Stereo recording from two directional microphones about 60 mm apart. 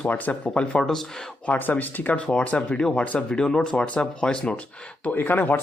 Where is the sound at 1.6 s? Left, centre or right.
Left.